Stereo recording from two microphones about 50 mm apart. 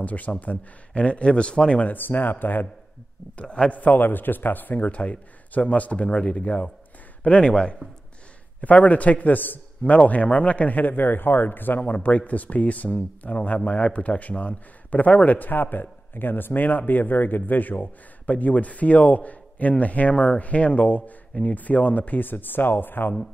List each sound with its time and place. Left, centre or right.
0.0 s speech: left
1.9 s a man's voice: left
3.3 s speech: left
3.7 s a man's voice: left
11.8 s a man's voice: left